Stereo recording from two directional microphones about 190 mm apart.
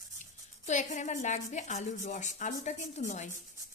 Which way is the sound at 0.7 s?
40° left (ahead or behind).